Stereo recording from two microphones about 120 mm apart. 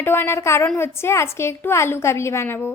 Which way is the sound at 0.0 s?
20° left (ahead or behind).